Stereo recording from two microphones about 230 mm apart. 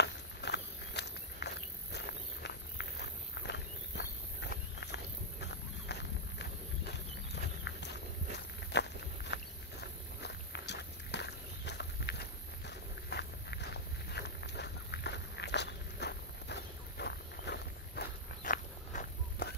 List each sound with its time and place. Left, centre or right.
0.0 s walk: left
7.7 s walk: left